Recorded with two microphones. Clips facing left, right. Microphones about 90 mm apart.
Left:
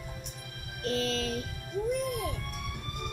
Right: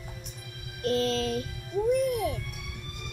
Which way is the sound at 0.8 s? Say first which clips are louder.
Right 4 dB; 40° right (ahead or behind).